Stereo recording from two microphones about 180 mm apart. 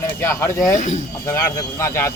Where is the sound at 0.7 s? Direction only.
40° left (ahead or behind).